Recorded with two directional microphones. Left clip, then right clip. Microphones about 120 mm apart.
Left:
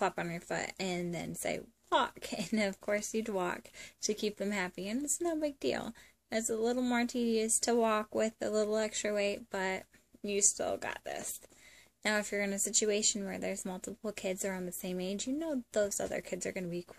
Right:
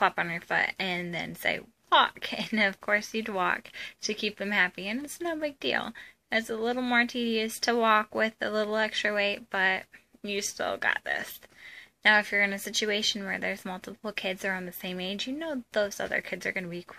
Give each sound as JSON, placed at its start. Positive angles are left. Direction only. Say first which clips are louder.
{"t": 0.0, "sound": "a woman's voice", "louder": "right 8 dB", "side_deg": 40}